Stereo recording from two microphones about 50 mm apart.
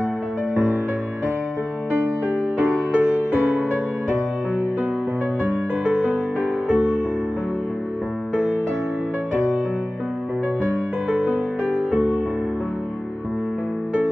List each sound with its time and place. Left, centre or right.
2.5 s music: right
5.9 s music: right
11.9 s music: right